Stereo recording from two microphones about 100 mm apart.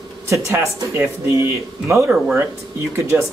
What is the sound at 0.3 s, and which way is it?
Speech, 25° right (ahead or behind).